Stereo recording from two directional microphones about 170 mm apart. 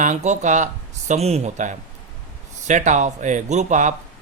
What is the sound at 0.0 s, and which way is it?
Speech, 45° right (ahead or behind).